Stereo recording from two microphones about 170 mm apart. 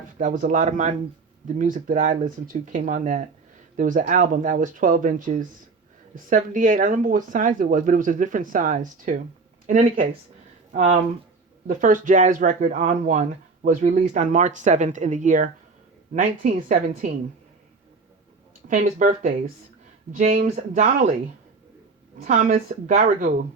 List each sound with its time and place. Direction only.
0.2 s speech: 45° right (ahead or behind)
10.7 s speech: 45° right (ahead or behind)
18.7 s speech: 45° right (ahead or behind)
22.2 s speech: 50° right (ahead or behind)